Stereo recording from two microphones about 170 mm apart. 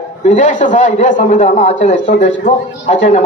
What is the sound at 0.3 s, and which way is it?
A man's voice, 45° left (ahead or behind).